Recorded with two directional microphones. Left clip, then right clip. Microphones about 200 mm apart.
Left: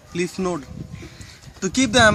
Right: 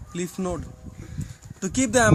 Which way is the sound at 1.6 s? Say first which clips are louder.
Left 5 dB; 25° right (ahead or behind).